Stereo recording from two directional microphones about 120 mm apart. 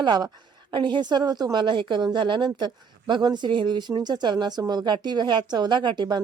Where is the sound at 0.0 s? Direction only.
35° right (ahead or behind).